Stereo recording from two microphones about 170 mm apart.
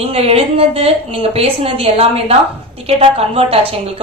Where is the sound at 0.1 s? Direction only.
35° right (ahead or behind).